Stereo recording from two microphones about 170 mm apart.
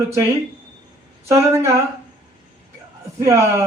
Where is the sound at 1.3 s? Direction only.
15° right (ahead or behind).